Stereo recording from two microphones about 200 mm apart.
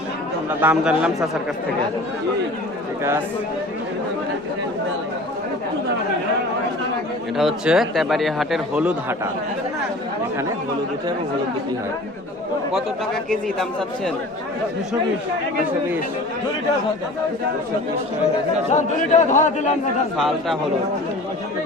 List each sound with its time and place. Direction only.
0.6 s a man's voice: 10° right (ahead or behind)
7.3 s a man's voice: centre (ahead or behind)
13.3 s a man's voice: 5° left (ahead or behind)
18.7 s a man's voice: 35° left (ahead or behind)
20.1 s a man's voice: centre (ahead or behind)